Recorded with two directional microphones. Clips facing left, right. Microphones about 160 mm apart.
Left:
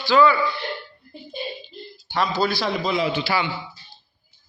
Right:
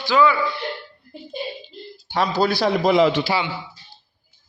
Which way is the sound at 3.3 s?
20° right (ahead or behind).